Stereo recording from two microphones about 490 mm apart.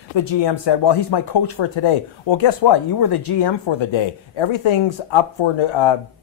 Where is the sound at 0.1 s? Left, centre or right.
Left.